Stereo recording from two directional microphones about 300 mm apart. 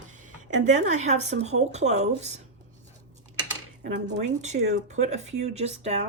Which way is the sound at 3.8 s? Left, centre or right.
Right.